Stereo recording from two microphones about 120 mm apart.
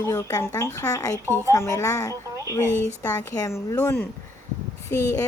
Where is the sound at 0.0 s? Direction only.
25° left (ahead or behind).